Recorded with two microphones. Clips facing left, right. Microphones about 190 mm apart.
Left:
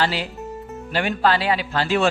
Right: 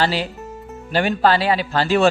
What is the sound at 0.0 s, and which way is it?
Speech, 35° right (ahead or behind).